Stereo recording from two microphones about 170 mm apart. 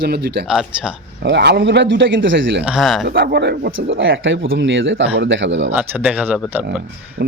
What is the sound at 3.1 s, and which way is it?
Speech, 65° right (ahead or behind).